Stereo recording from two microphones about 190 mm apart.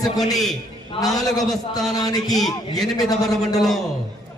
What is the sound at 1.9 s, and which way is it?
Speech, 20° left (ahead or behind).